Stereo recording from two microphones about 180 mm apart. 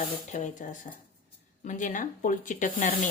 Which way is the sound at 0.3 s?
45° left (ahead or behind).